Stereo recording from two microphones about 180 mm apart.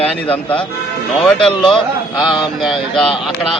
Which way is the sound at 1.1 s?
5° left (ahead or behind).